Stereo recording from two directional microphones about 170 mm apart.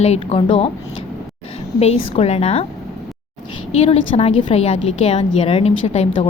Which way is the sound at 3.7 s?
35° left (ahead or behind).